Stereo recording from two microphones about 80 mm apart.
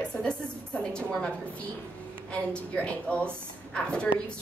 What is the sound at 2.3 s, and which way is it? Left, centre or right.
A woman's voice, centre.